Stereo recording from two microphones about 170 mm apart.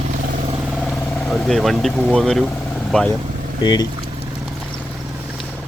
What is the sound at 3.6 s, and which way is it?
Speech, 25° left (ahead or behind).